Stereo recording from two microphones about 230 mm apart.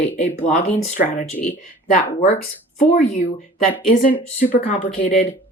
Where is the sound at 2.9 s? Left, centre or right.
Left.